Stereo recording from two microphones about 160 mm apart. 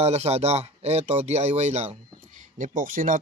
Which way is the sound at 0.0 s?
40° right (ahead or behind).